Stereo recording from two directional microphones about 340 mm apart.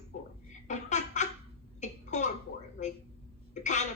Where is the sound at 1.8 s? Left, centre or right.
Left.